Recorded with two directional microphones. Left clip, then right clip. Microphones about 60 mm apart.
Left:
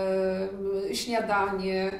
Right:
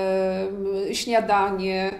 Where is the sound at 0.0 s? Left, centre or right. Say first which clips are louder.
Right 4 dB; right.